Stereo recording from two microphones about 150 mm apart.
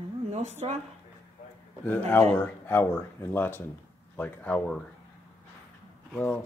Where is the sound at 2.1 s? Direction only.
10° left (ahead or behind).